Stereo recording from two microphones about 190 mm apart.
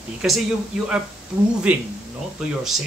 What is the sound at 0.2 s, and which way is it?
Speech, 5° right (ahead or behind).